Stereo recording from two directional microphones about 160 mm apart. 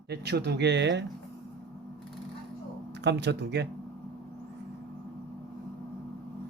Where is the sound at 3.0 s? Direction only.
90° right.